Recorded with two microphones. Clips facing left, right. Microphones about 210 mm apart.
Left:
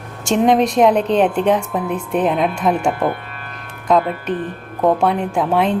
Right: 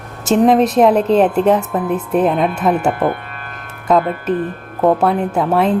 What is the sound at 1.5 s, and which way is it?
Speech, 5° right (ahead or behind).